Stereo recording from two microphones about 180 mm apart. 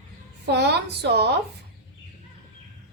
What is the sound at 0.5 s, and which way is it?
Speech, 65° right (ahead or behind).